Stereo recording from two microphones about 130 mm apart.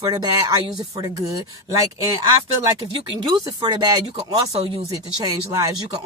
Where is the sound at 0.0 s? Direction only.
30° right (ahead or behind).